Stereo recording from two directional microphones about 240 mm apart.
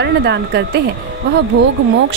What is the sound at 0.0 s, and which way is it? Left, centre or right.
Speech, right.